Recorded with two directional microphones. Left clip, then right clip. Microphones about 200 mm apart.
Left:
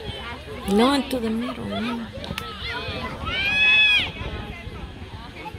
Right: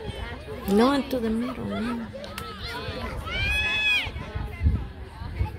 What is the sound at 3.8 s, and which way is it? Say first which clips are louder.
Run: left 5 dB; 55° right (ahead or behind).